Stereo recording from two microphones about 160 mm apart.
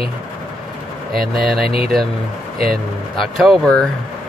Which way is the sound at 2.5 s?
65° right (ahead or behind).